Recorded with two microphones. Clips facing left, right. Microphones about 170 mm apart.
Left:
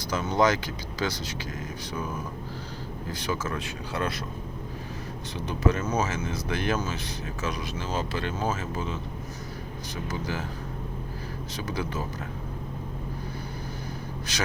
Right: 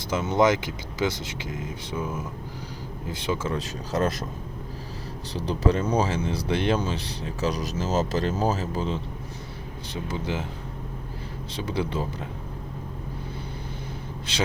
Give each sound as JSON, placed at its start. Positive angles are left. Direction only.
{"t": 0.1, "sound": "speech", "side_deg": -25}
{"t": 3.9, "sound": "speech", "side_deg": -40}
{"t": 5.3, "sound": "speech", "side_deg": -35}
{"t": 11.5, "sound": "speech", "side_deg": -30}
{"t": 14.3, "sound": "speech", "side_deg": -25}